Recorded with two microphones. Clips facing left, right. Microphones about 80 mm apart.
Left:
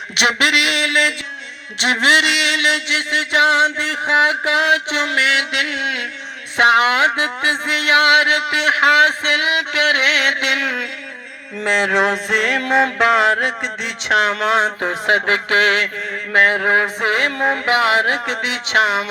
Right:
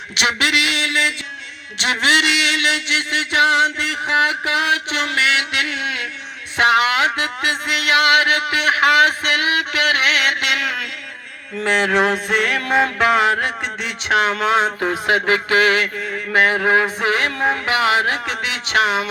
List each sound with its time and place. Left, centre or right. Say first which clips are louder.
0.2 s a sound: left 2 dB; left
1.8 s mantra: left 2 dB; left
11.5 s music: even; centre
13.0 s mantra: left 1 dB; left